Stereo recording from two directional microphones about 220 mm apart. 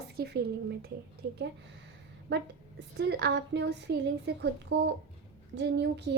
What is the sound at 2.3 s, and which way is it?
A woman's voice, 50° right (ahead or behind).